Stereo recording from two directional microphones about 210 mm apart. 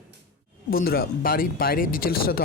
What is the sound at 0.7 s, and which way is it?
Speech, 45° left (ahead or behind).